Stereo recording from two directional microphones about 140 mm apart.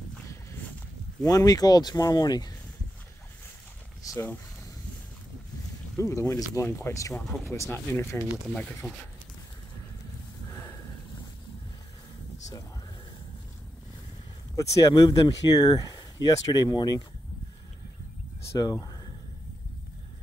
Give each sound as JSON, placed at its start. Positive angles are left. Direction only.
{"t": 1.2, "sound": "speech", "side_deg": 25}
{"t": 4.1, "sound": "speech", "side_deg": 15}
{"t": 5.9, "sound": "speech", "side_deg": 20}
{"t": 8.5, "sound": "speech", "side_deg": 5}
{"t": 14.5, "sound": "speech", "side_deg": 20}
{"t": 18.6, "sound": "speech", "side_deg": 25}